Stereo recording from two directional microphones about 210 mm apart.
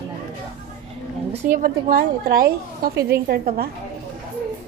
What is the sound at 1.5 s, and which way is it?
A woman's voice, 40° right (ahead or behind).